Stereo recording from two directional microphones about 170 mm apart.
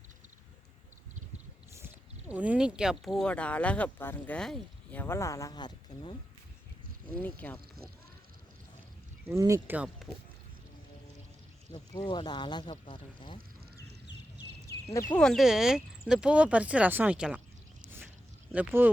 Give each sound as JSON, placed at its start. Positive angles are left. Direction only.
{"t": 2.3, "sound": "speech", "side_deg": -5}
{"t": 7.2, "sound": "speech", "side_deg": 10}
{"t": 9.2, "sound": "speech", "side_deg": -15}
{"t": 11.9, "sound": "speech", "side_deg": 25}
{"t": 15.1, "sound": "speech", "side_deg": 5}
{"t": 18.5, "sound": "speech", "side_deg": -10}